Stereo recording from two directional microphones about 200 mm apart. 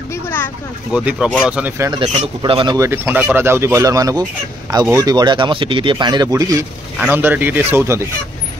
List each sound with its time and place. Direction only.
0.1 s a sound: 10° left (ahead or behind)
0.9 s speech: 5° right (ahead or behind)
1.9 s speech: 25° right (ahead or behind)